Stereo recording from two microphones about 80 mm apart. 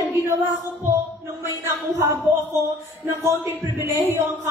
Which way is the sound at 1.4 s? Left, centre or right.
Right.